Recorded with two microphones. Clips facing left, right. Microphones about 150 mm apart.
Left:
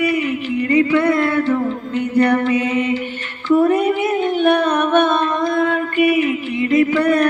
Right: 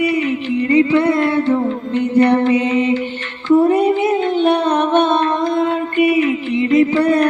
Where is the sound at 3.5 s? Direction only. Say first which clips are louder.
Right 2 dB; 25° right (ahead or behind).